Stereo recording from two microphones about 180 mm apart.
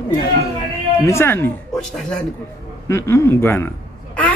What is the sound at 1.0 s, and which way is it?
Speech, 15° left (ahead or behind).